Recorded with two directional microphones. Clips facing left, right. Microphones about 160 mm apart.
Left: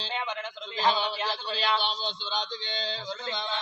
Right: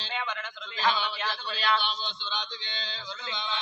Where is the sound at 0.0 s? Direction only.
30° left (ahead or behind).